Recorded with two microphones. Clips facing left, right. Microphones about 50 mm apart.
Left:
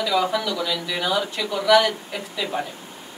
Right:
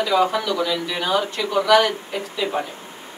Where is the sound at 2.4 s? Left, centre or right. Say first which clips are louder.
Right 4 dB; right.